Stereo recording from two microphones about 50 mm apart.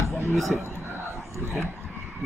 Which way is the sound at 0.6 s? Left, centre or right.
Right.